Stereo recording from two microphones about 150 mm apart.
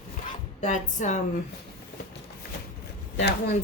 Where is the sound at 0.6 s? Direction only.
55° left (ahead or behind).